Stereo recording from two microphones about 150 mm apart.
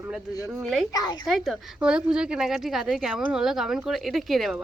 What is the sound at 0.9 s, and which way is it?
Speech, 25° left (ahead or behind).